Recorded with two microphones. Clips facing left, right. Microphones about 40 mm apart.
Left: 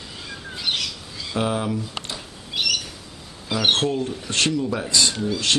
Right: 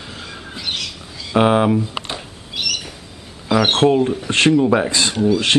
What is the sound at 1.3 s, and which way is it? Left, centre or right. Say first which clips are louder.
Speech: right 10 dB; right.